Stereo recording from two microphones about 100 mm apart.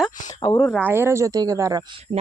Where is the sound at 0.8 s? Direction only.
20° right (ahead or behind).